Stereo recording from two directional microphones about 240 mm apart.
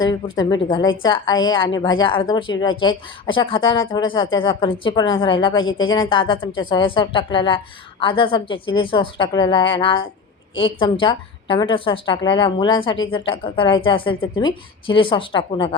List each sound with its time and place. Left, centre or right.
0.3 s a woman's voice: centre
5.5 s speech: left
5.9 s a woman's voice: left